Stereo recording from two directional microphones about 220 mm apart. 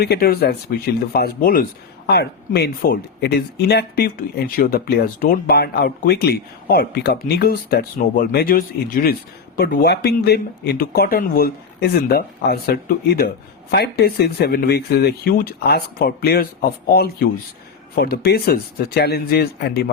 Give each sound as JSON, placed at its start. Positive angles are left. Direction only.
{"t": 0.0, "sound": "speech", "side_deg": 45}